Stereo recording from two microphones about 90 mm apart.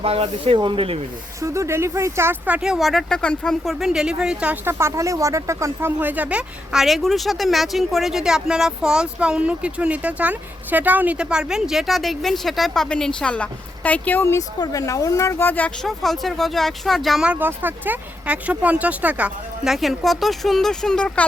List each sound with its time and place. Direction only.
0.0 s speech: 90° right
1.4 s speech: 30° right (ahead or behind)
2.5 s speech: 5° right (ahead or behind)
4.6 s speech: 25° right (ahead or behind)
6.0 s speech: 20° right (ahead or behind); by 14.4 s 25° left (ahead or behind)
14.6 s speech: 40° left (ahead or behind); by 15.7 s 20° left (ahead or behind)
15.8 s speech: 5° left (ahead or behind)
17.2 s speech: 20° right (ahead or behind)
19.7 s speech: centre (ahead or behind)